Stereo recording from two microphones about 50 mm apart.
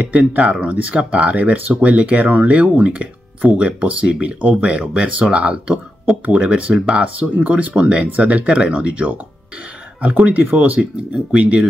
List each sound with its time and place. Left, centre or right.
0.0 s speech: right